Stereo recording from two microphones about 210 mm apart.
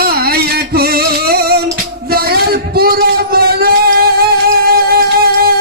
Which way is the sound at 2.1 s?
45° right (ahead or behind).